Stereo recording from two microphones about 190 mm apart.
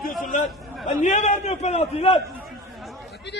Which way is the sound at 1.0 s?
40° left (ahead or behind).